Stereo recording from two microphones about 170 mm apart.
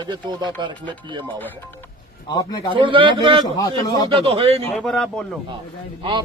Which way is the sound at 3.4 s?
20° left (ahead or behind).